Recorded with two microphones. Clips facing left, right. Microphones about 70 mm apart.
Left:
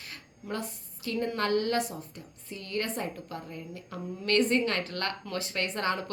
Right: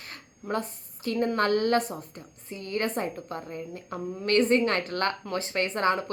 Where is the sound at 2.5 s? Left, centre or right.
Right.